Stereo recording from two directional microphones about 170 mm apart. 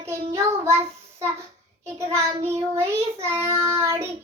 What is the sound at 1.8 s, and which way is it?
Child singing, 15° right (ahead or behind).